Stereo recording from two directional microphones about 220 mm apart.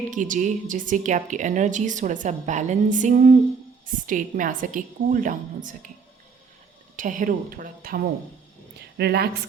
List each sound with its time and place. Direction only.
0.1 s speech: 35° right (ahead or behind)
6.9 s speech: 35° right (ahead or behind)